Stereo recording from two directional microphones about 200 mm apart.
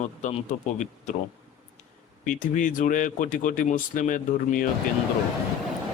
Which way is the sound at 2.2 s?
40° left (ahead or behind).